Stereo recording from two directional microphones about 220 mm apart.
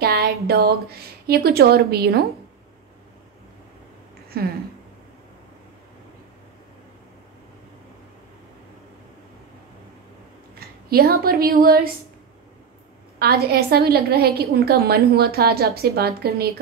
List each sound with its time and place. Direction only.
0.0 s a woman's voice: 45° right (ahead or behind)
4.3 s a woman's voice: 45° right (ahead or behind)
10.5 s speech: 45° right (ahead or behind)
13.2 s a woman's voice: 45° right (ahead or behind)